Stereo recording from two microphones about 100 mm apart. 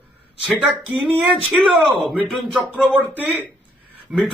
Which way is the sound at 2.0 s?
10° right (ahead or behind).